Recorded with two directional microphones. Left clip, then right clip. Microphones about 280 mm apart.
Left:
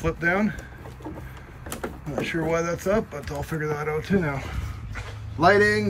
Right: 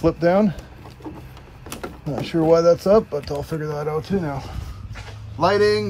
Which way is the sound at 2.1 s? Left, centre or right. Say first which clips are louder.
Right 8 dB; centre.